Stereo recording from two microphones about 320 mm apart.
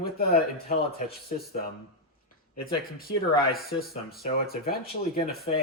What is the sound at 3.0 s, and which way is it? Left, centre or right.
Speech, left.